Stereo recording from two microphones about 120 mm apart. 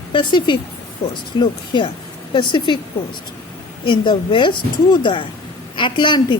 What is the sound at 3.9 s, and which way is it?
Speech, 40° left (ahead or behind).